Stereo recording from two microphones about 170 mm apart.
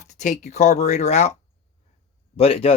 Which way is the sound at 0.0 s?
45° left (ahead or behind).